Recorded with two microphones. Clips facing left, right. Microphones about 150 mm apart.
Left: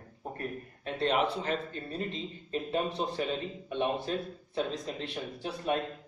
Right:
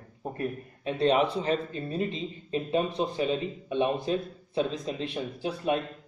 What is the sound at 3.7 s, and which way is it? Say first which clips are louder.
A man's voice: right 4 dB; 15° right (ahead or behind).